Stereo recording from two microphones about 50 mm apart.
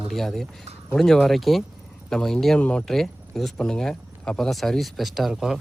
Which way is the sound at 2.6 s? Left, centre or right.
Left.